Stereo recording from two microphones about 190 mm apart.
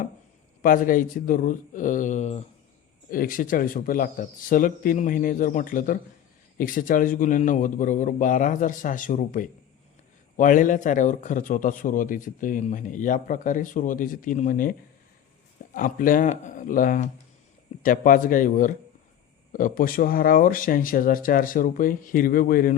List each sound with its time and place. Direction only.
0.6 s a man's voice: 45° left (ahead or behind)
3.1 s a man's voice: 45° left (ahead or behind)